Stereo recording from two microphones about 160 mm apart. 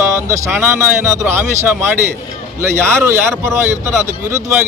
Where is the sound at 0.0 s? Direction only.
20° right (ahead or behind).